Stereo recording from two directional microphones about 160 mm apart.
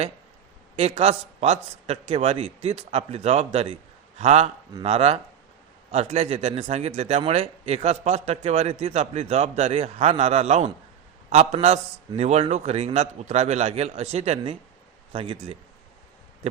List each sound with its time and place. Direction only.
0.8 s a man's voice: 45° right (ahead or behind)